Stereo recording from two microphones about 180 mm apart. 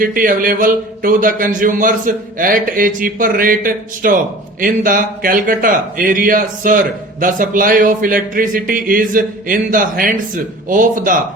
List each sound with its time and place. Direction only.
0.0 s speech: 50° right (ahead or behind)